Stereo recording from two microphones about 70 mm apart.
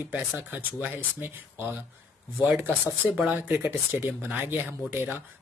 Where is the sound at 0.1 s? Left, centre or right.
Right.